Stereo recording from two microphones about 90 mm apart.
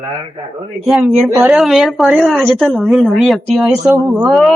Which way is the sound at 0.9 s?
5° right (ahead or behind).